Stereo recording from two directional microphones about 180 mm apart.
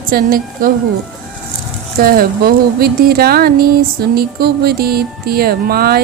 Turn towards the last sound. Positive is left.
turn(degrees=-60)  # may be behind; listen again after turning